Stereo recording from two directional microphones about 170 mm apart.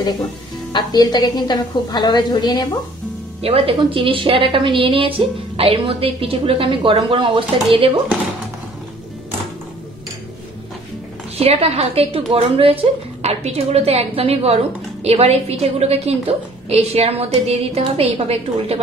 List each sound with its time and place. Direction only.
0.7 s a woman's voice: 25° left (ahead or behind)
3.4 s a woman's voice: 35° right (ahead or behind)
11.3 s a woman's voice: 35° right (ahead or behind)